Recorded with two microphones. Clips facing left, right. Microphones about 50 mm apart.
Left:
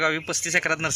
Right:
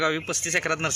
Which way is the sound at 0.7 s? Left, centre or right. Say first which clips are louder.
Left 1 dB; left.